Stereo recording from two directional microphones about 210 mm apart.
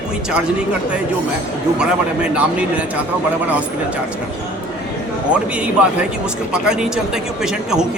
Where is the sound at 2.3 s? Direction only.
5° right (ahead or behind).